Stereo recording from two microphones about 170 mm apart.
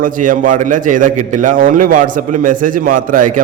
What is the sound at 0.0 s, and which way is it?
A man's voice, 50° right (ahead or behind).